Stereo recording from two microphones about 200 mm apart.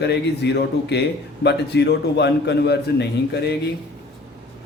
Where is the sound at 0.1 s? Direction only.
55° left (ahead or behind).